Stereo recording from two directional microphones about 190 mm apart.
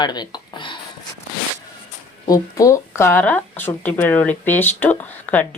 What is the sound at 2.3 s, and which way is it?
Speech, 15° left (ahead or behind).